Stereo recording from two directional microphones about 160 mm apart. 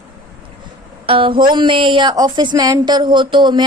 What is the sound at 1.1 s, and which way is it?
Speech, 35° right (ahead or behind).